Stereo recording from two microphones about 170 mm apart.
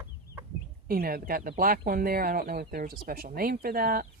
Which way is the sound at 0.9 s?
60° right (ahead or behind).